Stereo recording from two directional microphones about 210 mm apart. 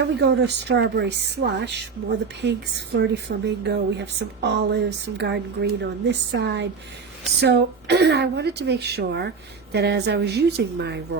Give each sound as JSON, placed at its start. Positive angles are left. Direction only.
{"t": 0.0, "sound": "a woman's voice", "side_deg": -50}